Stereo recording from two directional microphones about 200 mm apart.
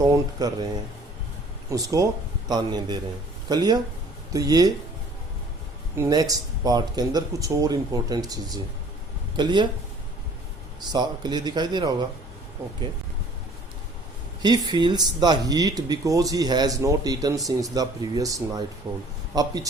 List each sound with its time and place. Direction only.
0.0 s speech: 15° right (ahead or behind)
1.7 s speech: 15° right (ahead or behind)
6.0 s speech: 20° right (ahead or behind)
10.8 s speech: 20° right (ahead or behind)
14.4 s speech: 20° right (ahead or behind)